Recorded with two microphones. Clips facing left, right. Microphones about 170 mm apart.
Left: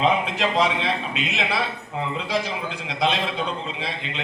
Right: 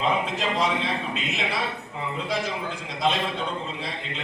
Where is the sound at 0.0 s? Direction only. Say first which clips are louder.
Left 4 dB; 70° left (ahead or behind).